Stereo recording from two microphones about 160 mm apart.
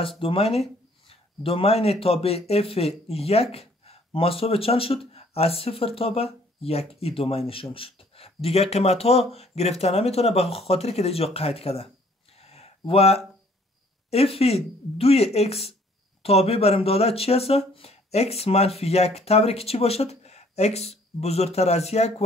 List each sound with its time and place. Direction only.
0.2 s speech: 35° left (ahead or behind)
12.4 s a sound: 40° left (ahead or behind)
14.1 s speech: 40° left (ahead or behind)